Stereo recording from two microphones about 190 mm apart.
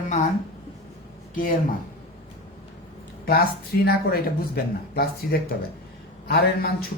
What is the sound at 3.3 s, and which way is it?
A man's voice, 55° left (ahead or behind).